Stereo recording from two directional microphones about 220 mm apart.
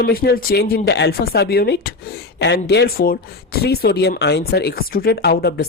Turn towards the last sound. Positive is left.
turn(degrees=45)  # may be behind; listen again after turning